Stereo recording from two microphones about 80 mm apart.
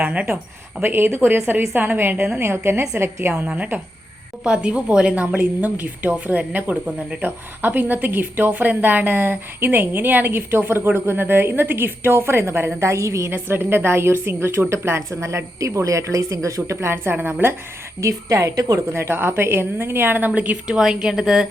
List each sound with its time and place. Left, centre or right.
0.0 s a woman's voice: centre
0.8 s a woman's voice: right
3.4 s a woman's voice: centre; by 16.7 s right
16.8 s a woman's voice: right
18.0 s a woman's voice: right
18.9 s a woman's voice: right
20.7 s a woman's voice: centre